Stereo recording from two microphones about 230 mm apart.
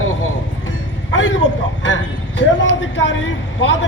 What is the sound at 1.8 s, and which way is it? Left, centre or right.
Speech, left.